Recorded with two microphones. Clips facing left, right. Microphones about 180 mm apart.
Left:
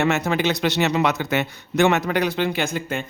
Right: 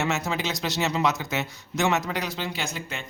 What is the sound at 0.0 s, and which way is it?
Speech, 60° left (ahead or behind).